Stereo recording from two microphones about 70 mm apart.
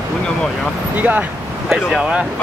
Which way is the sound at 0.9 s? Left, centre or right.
Right.